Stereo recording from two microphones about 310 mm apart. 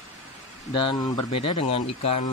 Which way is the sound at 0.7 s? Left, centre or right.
Centre.